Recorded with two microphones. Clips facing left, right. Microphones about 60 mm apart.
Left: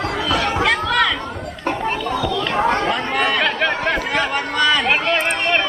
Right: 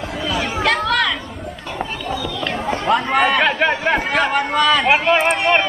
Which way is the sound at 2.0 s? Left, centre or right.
Left.